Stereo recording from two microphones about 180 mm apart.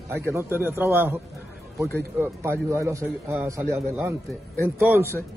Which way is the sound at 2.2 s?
15° right (ahead or behind).